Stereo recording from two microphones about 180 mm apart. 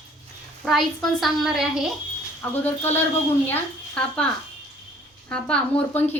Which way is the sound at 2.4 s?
10° left (ahead or behind).